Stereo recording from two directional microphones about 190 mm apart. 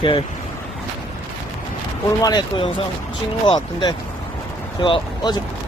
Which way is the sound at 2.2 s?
20° left (ahead or behind).